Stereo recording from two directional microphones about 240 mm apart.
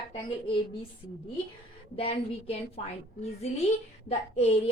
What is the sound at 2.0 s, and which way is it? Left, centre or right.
Speech, left.